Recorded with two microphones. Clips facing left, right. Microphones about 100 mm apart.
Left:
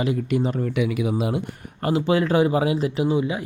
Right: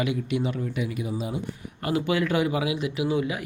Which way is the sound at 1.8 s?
30° left (ahead or behind).